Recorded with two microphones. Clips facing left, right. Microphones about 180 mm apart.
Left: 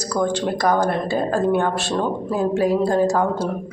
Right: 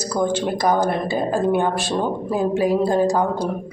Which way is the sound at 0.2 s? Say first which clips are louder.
Even; 5° right (ahead or behind).